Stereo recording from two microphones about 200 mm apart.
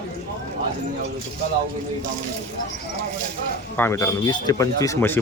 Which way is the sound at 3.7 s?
10° left (ahead or behind).